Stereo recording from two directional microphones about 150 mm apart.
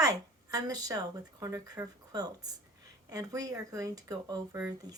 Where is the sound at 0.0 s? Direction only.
25° right (ahead or behind).